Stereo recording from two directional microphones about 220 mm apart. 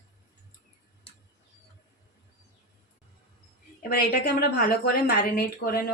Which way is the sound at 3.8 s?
45° left (ahead or behind).